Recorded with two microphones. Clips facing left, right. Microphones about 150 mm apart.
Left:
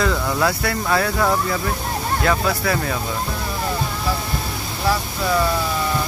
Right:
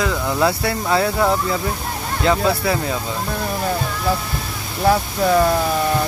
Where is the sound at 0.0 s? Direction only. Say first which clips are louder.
Right 1 dB; 20° right (ahead or behind).